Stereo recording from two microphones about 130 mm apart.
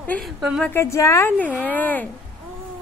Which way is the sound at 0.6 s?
20° left (ahead or behind).